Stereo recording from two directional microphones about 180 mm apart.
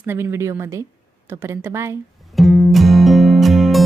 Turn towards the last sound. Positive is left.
turn(degrees=0)  # may be behind; listen again after turning